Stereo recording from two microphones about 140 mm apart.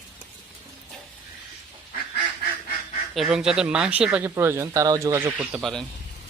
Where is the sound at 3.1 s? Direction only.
5° right (ahead or behind); by 5.3 s 20° right (ahead or behind).